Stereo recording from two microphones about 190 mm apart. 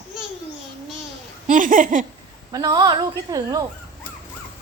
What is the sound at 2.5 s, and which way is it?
A woman's voice, 20° right (ahead or behind).